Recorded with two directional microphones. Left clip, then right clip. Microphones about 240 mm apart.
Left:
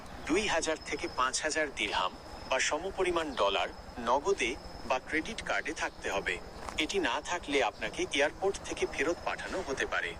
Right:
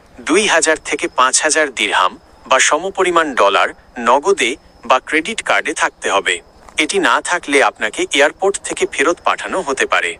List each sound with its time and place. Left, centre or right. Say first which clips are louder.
0.3 s speech: right 18 dB; right